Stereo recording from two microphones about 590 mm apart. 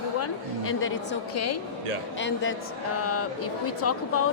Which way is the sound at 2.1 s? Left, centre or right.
Centre.